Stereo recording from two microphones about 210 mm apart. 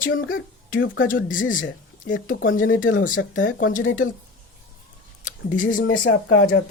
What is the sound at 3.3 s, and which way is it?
Speech, 40° left (ahead or behind).